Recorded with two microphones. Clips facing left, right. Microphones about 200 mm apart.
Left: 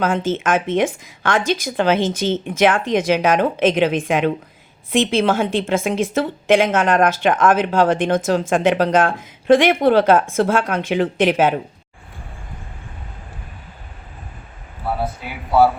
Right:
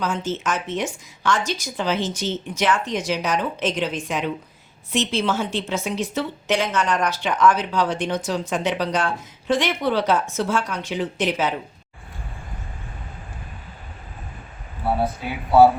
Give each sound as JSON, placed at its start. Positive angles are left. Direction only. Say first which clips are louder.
{"t": 0.0, "sound": "a woman's voice", "louder": "left 6 dB", "side_deg": 55}